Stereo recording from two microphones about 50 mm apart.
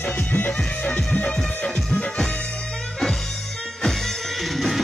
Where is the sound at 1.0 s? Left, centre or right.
Left.